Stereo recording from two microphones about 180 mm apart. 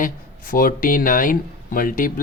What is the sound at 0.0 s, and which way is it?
Speech, 50° left (ahead or behind).